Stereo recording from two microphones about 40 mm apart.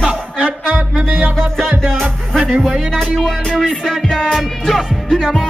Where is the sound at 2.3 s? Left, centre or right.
Right.